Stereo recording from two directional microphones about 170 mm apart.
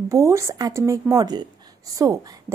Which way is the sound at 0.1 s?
15° right (ahead or behind).